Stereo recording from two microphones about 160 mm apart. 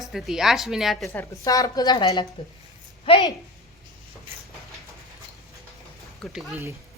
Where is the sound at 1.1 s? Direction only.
20° left (ahead or behind); by 3.2 s 35° left (ahead or behind).